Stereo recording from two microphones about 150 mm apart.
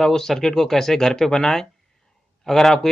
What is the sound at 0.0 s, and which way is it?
Speech, 5° left (ahead or behind).